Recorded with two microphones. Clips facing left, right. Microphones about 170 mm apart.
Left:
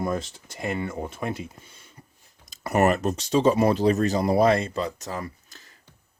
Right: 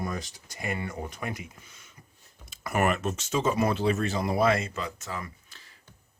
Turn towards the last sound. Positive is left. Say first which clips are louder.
# left 6 dB
turn(degrees=40)  # may be behind; listen again after turning